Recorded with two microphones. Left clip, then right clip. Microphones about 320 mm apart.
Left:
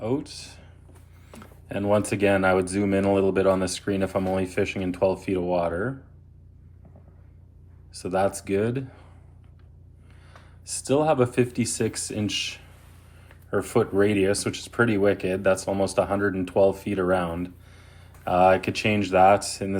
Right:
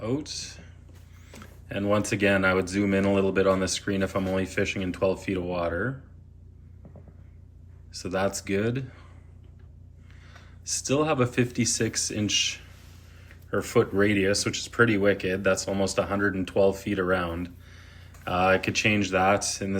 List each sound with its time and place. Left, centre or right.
0.0 s speech: centre
7.9 s speech: centre
10.7 s speech: centre